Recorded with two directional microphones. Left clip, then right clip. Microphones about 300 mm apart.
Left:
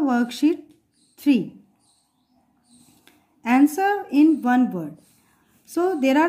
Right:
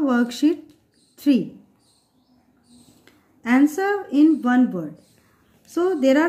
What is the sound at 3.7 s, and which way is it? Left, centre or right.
A woman's voice, centre.